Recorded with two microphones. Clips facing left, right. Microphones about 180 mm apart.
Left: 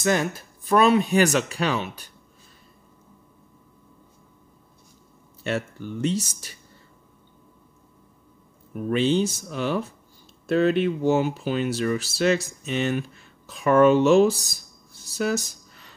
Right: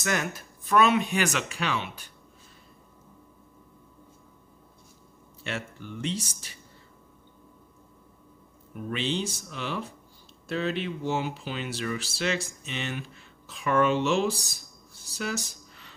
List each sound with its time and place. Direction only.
0.0 s speech: 30° left (ahead or behind)
5.4 s speech: 40° left (ahead or behind)
8.9 s speech: 45° left (ahead or behind)
15.1 s a sound: 40° left (ahead or behind)